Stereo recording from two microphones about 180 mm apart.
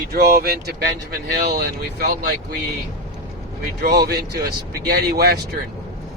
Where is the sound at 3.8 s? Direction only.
60° right (ahead or behind).